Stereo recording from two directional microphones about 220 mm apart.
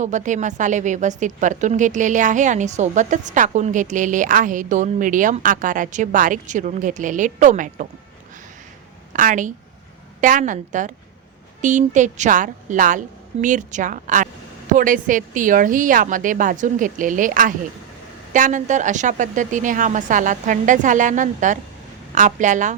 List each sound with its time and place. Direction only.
0.0 s a woman's voice: 35° right (ahead or behind)
9.1 s a woman's voice: 35° right (ahead or behind)